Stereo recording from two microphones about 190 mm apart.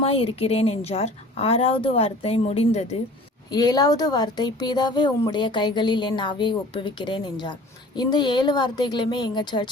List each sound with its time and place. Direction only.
0.0 s a woman's voice: 30° left (ahead or behind)
3.5 s speech: 20° left (ahead or behind)